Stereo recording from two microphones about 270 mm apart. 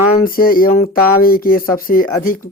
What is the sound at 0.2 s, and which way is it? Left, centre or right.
Speech, left.